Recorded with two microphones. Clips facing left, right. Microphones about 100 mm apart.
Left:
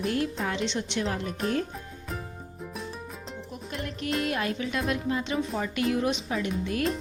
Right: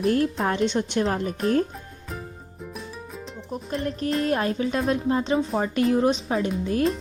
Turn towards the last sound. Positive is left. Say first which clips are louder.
# right 5 dB
turn(degrees=-35)  # may be behind; listen again after turning